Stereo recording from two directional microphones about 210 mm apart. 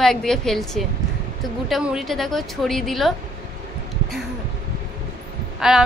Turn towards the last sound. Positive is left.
turn(degrees=0)  # may be behind; listen again after turning